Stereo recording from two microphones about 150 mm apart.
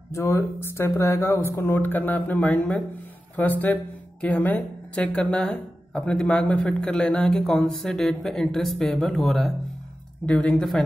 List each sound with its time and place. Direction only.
0.1 s a woman's voice: 20° left (ahead or behind); by 10.8 s centre (ahead or behind)